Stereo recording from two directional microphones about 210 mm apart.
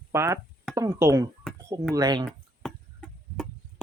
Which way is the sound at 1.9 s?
20° right (ahead or behind).